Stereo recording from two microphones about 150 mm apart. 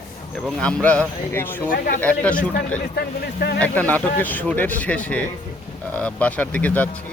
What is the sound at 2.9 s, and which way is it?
Speech, 90° left.